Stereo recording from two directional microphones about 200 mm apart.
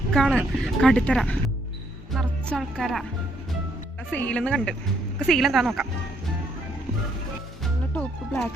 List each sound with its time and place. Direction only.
0.1 s a woman's voice: 5° left (ahead or behind)
4.1 s a woman's voice: 5° left (ahead or behind)
7.6 s music: 5° left (ahead or behind)